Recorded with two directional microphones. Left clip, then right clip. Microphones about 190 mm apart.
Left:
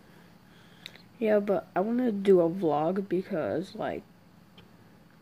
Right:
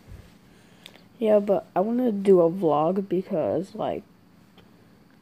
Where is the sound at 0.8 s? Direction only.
5° right (ahead or behind).